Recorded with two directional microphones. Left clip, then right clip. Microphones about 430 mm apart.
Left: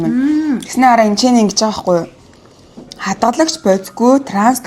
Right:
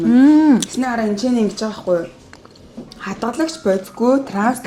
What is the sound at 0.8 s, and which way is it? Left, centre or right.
A woman's voice, left.